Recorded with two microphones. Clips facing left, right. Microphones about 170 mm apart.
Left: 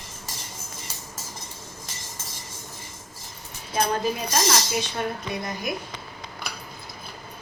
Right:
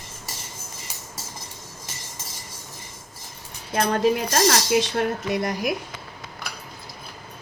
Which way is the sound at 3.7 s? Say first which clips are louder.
Right 4 dB; 70° right (ahead or behind).